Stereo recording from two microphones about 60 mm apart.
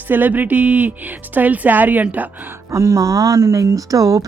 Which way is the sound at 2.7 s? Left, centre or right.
Right.